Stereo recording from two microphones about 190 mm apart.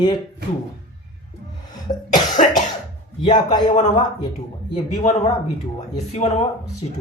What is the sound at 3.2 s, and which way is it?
Speech, 20° left (ahead or behind).